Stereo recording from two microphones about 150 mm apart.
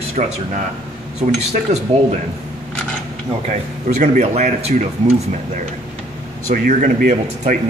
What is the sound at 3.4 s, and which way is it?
Speech, 55° right (ahead or behind).